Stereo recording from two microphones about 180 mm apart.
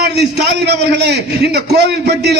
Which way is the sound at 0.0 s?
65° right (ahead or behind).